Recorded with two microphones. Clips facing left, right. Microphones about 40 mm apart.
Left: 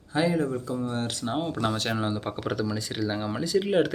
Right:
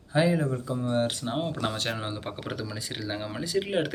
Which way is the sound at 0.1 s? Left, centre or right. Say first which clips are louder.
Even; centre.